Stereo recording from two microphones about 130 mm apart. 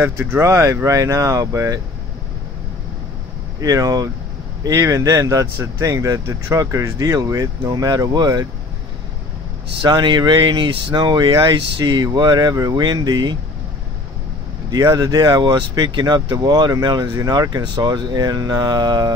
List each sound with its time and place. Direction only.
0.0 s speech: 15° right (ahead or behind)
3.6 s speech: 30° right (ahead or behind)
9.8 s speech: 35° right (ahead or behind)
14.7 s speech: 30° right (ahead or behind)